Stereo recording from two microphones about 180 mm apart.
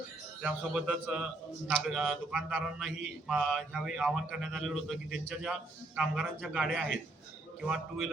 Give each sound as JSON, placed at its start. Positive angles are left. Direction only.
{"t": 0.4, "sound": "a man's voice", "side_deg": -5}